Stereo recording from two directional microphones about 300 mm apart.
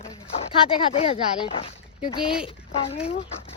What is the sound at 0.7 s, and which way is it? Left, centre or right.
Speech, centre.